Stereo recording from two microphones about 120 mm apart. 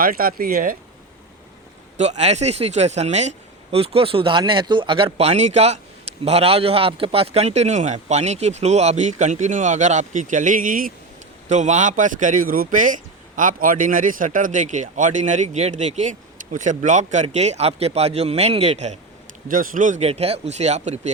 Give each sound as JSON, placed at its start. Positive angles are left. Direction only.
{"t": 2.0, "sound": "a man's voice", "side_deg": -70}
{"t": 17.2, "sound": "a man's voice", "side_deg": -70}
{"t": 19.7, "sound": "speech", "side_deg": -90}